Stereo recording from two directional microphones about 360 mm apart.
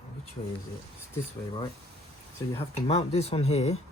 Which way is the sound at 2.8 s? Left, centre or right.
Centre.